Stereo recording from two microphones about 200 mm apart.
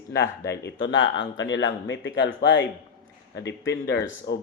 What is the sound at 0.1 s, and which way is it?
Speech, 55° left (ahead or behind).